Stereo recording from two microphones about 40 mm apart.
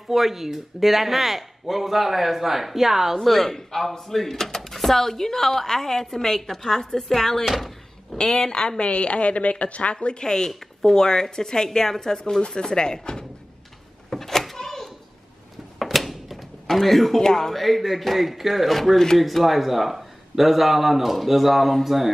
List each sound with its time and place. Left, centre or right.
0.1 s speech: centre
3.2 s speech: centre
7.4 s door: centre
8.2 s a woman's voice: centre
9.9 s speech: left
14.1 s door: centre
15.8 s a sound: centre
16.6 s speech: centre